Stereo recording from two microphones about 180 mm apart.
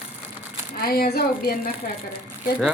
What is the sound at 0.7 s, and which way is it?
Speech, 55° left (ahead or behind).